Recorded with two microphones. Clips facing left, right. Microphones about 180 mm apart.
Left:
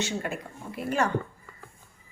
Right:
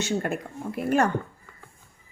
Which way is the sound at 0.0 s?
50° right (ahead or behind).